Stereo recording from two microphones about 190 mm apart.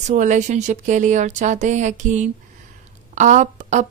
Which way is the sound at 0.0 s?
40° right (ahead or behind).